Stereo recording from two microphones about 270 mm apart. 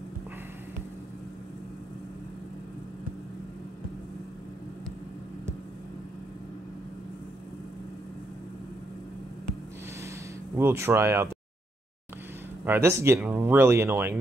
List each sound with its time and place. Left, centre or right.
10.6 s speech: centre
12.6 s speech: centre